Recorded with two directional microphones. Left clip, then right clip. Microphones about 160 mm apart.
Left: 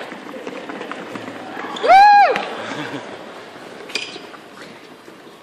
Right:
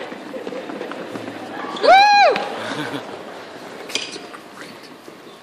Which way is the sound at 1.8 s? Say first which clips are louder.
Left 2 dB; 60° right (ahead or behind).